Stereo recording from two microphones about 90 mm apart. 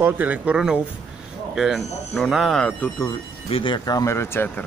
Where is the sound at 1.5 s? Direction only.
5° right (ahead or behind).